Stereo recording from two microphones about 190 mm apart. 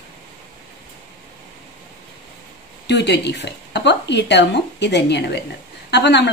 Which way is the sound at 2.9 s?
65° left (ahead or behind).